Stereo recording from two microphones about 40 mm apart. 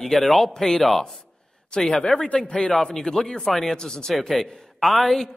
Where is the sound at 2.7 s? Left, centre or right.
Centre.